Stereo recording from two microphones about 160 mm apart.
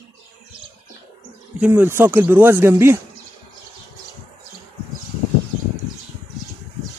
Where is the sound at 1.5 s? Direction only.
15° right (ahead or behind).